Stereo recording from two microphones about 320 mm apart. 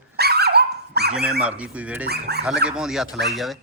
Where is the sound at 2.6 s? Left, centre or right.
Centre.